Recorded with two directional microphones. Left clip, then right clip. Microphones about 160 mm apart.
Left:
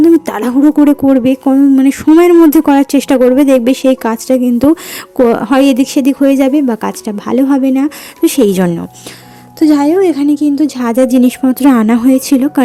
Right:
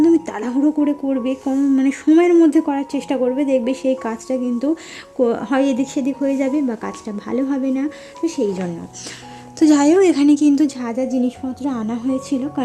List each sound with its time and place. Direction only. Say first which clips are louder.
0.0 s speech: left 7 dB; 35° left (ahead or behind)
2.5 s speech: left 10 dB; 45° left (ahead or behind)
8.2 s a woman's voice: left 11 dB; 50° left (ahead or behind)
9.6 s speech: left 4 dB; 20° left (ahead or behind)
10.8 s a woman's voice: left 11 dB; 50° left (ahead or behind)